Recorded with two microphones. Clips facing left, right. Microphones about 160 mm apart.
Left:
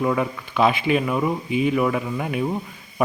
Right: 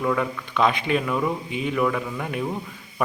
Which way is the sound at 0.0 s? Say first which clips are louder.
Left 2 dB; 20° left (ahead or behind).